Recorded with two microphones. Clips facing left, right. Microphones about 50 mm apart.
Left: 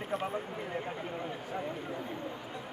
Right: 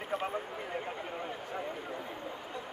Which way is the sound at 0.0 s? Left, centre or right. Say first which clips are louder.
Even; centre.